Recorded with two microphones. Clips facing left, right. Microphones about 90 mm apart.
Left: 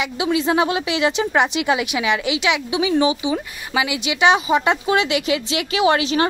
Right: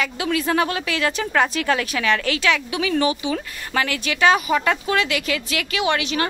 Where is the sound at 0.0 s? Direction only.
20° left (ahead or behind).